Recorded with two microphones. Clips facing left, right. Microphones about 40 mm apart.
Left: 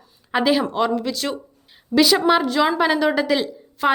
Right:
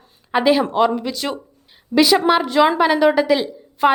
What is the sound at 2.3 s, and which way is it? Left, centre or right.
A woman's voice, centre.